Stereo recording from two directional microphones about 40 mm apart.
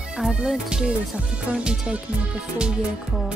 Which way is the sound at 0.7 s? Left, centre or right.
Right.